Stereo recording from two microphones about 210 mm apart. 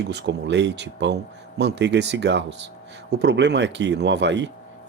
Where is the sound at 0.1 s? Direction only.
55° right (ahead or behind).